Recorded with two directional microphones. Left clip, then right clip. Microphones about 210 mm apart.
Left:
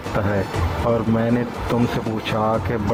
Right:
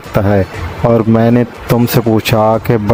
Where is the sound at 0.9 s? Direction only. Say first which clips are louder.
Right 11 dB; 50° right (ahead or behind).